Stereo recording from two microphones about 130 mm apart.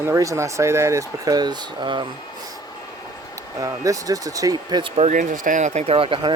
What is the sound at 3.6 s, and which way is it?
Speech, 25° right (ahead or behind).